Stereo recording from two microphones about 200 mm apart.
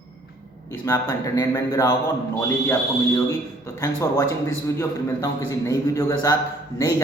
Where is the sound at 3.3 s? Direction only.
15° left (ahead or behind).